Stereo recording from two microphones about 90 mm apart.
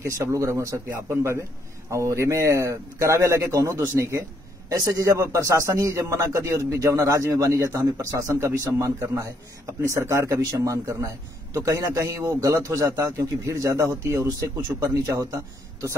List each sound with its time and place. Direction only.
0.0 s a man's voice: 35° right (ahead or behind)
4.6 s a man's voice: 40° right (ahead or behind)